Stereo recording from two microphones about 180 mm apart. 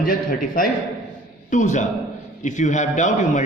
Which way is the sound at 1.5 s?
40° left (ahead or behind).